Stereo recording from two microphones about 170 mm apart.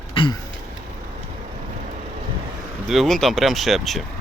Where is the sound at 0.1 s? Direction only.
30° left (ahead or behind).